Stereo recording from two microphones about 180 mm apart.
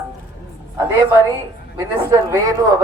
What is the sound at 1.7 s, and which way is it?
A woman's voice, 20° right (ahead or behind).